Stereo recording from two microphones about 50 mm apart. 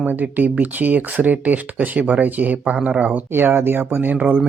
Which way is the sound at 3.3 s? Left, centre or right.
Right.